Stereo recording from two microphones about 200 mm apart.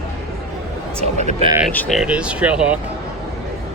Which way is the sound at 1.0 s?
35° right (ahead or behind).